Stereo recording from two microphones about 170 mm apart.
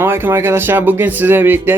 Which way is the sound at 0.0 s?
15° right (ahead or behind).